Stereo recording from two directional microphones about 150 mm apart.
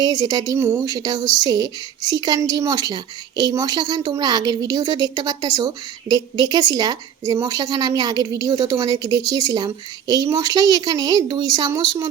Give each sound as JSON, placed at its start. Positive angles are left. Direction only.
{"t": 0.0, "sound": "a woman's voice", "side_deg": -25}